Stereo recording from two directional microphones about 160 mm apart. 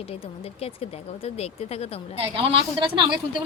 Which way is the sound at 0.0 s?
35° left (ahead or behind).